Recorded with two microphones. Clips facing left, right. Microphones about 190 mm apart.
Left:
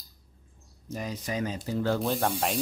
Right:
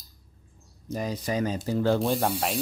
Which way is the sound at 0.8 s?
35° right (ahead or behind).